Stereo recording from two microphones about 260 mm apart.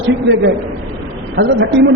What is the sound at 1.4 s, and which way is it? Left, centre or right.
Speech, right.